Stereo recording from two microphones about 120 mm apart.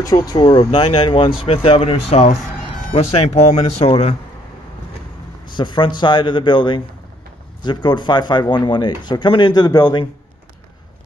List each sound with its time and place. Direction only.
0.0 s speech: 35° left (ahead or behind)
0.7 s speech: 50° left (ahead or behind)
5.6 s speech: 40° left (ahead or behind)